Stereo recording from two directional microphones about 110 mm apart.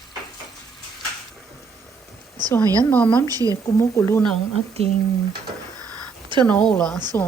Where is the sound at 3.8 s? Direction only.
25° left (ahead or behind).